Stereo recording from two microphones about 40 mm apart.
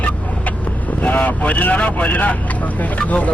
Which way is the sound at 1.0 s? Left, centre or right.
Left.